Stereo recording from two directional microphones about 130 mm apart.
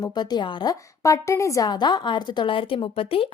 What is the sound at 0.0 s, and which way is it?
A woman's voice, 30° left (ahead or behind).